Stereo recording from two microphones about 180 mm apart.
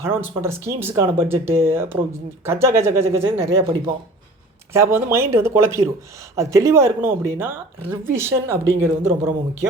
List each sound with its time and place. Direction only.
0.0 s speech: 15° right (ahead or behind)
3.2 s speech: 30° right (ahead or behind)
4.7 s speech: 15° right (ahead or behind)